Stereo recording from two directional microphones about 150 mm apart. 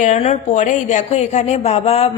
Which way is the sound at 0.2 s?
45° left (ahead or behind).